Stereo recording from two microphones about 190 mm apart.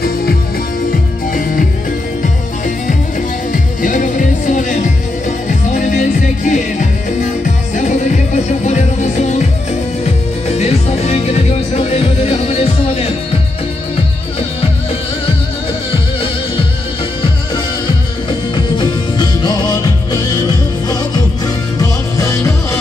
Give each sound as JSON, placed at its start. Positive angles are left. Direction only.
{"t": 0.0, "sound": "music", "side_deg": 50}
{"t": 3.5, "sound": "music", "side_deg": 45}
{"t": 18.8, "sound": "music", "side_deg": 25}
{"t": 21.7, "sound": "music", "side_deg": 15}